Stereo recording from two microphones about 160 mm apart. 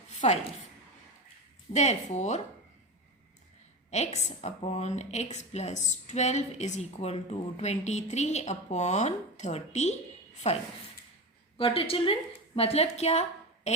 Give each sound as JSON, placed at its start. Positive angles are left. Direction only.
{"t": 0.2, "sound": "a woman's voice", "side_deg": 45}
{"t": 1.7, "sound": "a woman's voice", "side_deg": 45}
{"t": 3.9, "sound": "a woman's voice", "side_deg": 45}